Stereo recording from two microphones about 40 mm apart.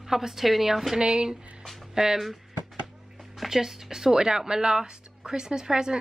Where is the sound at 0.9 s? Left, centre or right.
Centre.